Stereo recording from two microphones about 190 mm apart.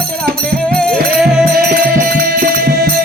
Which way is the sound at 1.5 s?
50° right (ahead or behind).